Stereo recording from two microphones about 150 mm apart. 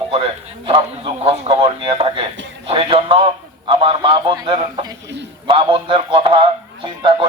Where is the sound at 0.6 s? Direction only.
40° right (ahead or behind).